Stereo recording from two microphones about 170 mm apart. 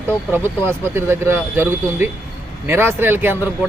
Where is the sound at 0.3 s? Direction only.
15° right (ahead or behind).